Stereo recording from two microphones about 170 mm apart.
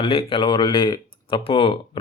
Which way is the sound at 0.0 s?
30° left (ahead or behind).